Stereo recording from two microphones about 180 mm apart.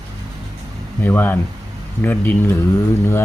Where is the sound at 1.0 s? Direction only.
10° left (ahead or behind).